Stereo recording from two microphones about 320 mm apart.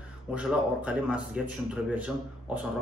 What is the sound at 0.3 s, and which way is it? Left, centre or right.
Speech, centre.